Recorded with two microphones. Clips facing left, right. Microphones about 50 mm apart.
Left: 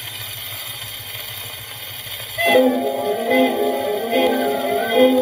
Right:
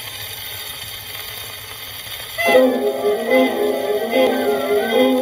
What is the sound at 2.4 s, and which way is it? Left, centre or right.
Music, centre.